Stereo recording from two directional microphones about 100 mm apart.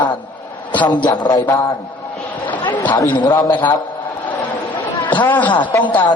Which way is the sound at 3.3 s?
30° left (ahead or behind).